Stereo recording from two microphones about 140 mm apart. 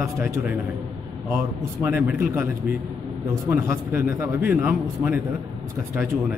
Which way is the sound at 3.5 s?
20° right (ahead or behind).